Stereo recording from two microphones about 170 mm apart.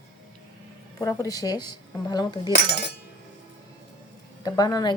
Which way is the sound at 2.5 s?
75° left (ahead or behind).